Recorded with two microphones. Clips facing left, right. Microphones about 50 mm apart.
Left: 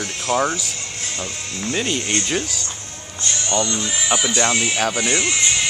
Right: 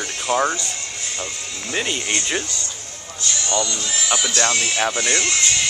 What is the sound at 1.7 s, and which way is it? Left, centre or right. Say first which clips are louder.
Speech: left 1 dB; centre.